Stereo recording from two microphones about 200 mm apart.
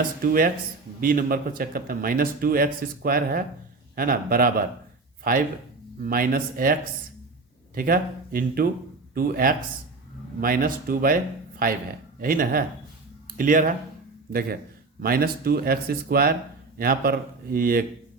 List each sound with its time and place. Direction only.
0.2 s speech: 45° right (ahead or behind)
7.8 s speech: 45° right (ahead or behind)
15.0 s speech: 50° right (ahead or behind)